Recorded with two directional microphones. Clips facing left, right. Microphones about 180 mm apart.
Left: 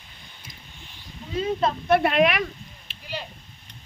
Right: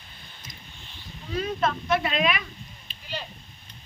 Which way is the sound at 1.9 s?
65° left (ahead or behind).